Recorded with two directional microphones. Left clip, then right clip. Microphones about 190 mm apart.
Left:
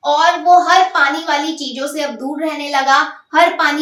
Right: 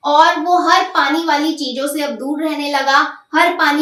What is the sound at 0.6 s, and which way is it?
A woman's voice, 25° left (ahead or behind).